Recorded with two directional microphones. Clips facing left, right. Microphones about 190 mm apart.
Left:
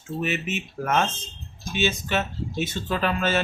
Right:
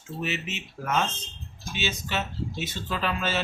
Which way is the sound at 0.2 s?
50° left (ahead or behind).